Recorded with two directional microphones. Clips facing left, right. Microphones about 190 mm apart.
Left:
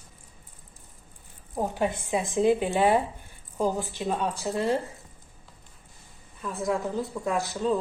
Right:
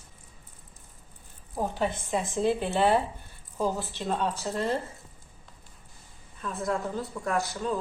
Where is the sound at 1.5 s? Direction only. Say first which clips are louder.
Left 2 dB; 15° left (ahead or behind).